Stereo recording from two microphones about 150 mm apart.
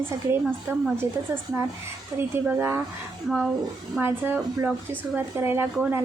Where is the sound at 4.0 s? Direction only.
15° right (ahead or behind).